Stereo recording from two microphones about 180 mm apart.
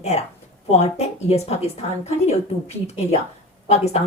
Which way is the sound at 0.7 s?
35° left (ahead or behind).